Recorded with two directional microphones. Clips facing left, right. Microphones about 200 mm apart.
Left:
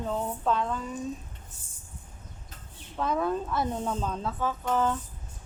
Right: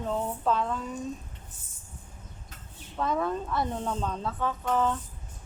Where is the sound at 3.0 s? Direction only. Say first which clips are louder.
Left 1 dB; centre (ahead or behind).